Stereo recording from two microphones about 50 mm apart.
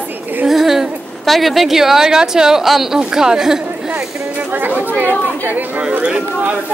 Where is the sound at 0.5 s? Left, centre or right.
Centre.